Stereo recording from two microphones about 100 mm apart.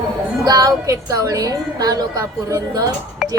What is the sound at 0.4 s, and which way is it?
Music, 40° right (ahead or behind).